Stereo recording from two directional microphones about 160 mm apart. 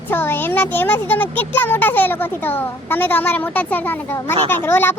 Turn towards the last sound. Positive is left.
turn(degrees=15)  # may be behind; listen again after turning